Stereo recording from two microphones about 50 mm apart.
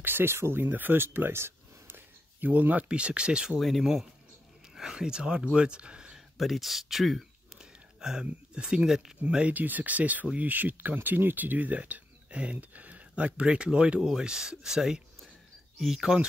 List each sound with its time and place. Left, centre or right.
0.0 s speech: right
0.7 s speech: right
2.4 s speech: right
2.9 s speech: right
3.5 s speech: centre
3.8 s speech: centre
6.3 s speech: centre
8.0 s speech: centre
8.8 s speech: centre
9.2 s speech: right
9.5 s speech: right; by 16.2 s centre